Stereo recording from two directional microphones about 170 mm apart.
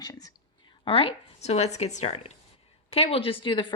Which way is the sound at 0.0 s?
20° left (ahead or behind).